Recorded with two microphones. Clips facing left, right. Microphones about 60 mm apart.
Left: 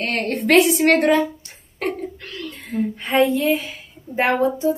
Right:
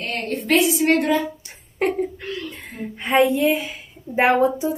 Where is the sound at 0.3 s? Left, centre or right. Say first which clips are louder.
Left 3 dB; left.